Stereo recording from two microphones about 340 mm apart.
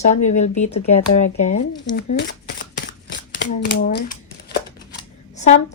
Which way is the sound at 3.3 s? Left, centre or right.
Left.